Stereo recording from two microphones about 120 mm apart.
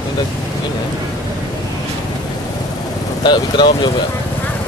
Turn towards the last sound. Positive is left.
turn(degrees=40)  # may be behind; listen again after turning